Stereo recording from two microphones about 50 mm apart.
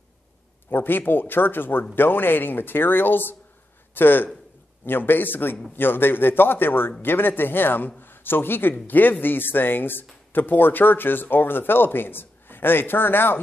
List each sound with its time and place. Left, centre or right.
0.7 s a man's voice: left